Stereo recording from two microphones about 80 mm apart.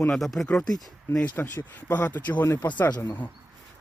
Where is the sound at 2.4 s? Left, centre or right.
Left.